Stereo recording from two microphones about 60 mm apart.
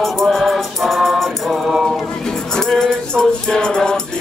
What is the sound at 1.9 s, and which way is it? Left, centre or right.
Music, centre.